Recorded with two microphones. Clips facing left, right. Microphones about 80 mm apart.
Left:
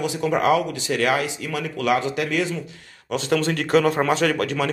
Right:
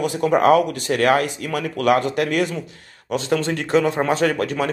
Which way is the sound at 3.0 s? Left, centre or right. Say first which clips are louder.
Right 1 dB; right.